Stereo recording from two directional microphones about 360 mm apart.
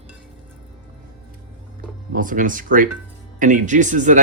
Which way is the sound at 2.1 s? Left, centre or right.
Right.